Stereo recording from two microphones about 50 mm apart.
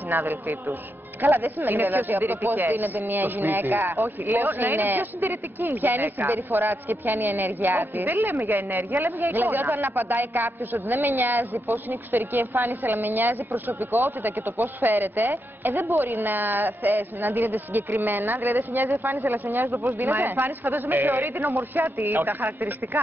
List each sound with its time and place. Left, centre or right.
0.1 s a woman's voice: right